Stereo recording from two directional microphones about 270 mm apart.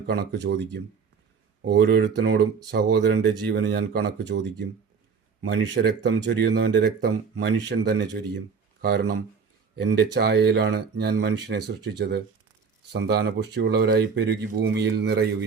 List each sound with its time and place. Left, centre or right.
0.1 s speech: right
9.7 s speech: right